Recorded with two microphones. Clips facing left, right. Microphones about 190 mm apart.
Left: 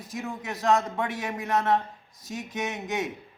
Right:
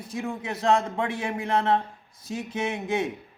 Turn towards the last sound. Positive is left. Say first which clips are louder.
# right 3 dB
turn(degrees=-30)  # may be behind; listen again after turning